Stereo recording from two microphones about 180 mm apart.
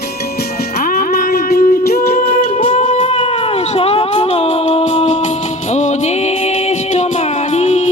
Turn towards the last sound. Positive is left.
turn(degrees=40)  # may be behind; listen again after turning